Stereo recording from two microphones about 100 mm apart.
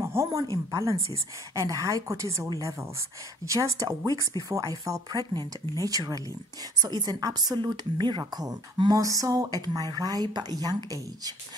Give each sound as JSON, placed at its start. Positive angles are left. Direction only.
{"t": 0.0, "sound": "a woman's voice", "side_deg": -30}